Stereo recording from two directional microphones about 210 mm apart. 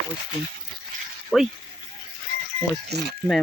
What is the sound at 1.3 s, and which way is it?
Speech, centre (ahead or behind).